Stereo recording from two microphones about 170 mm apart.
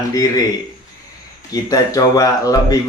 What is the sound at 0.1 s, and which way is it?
Speech, 20° left (ahead or behind).